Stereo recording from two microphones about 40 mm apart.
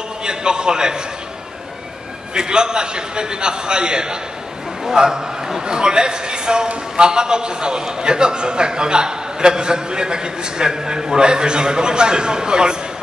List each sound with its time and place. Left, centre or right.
0.2 s a man's voice: right
2.3 s a man's voice: centre